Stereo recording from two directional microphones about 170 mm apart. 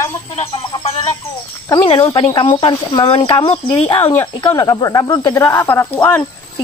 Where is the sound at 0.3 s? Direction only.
35° left (ahead or behind).